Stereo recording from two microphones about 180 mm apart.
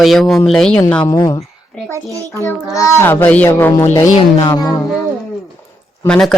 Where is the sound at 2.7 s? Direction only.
15° left (ahead or behind).